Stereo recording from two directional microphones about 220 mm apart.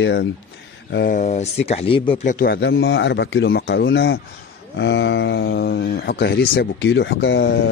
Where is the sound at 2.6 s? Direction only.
50° left (ahead or behind).